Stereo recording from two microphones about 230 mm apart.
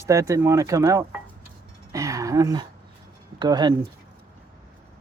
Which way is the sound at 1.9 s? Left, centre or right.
Centre.